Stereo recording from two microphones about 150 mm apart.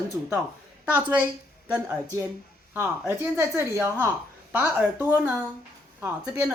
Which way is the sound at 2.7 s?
15° right (ahead or behind).